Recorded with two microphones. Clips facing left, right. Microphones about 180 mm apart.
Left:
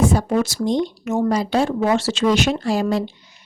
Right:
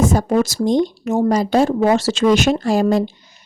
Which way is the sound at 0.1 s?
45° right (ahead or behind).